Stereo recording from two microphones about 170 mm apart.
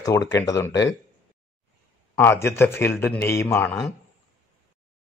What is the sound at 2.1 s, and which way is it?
A man's voice, 15° left (ahead or behind).